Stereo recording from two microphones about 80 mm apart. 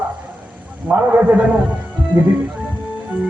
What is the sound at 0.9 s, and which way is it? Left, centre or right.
Speech, right.